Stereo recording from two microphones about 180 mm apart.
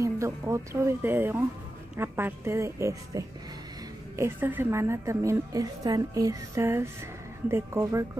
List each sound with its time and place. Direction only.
0.0 s a woman's voice: 15° right (ahead or behind)